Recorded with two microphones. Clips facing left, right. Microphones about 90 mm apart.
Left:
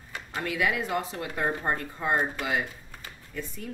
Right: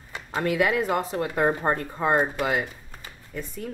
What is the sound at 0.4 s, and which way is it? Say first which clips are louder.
Speech: right 5 dB; 45° right (ahead or behind).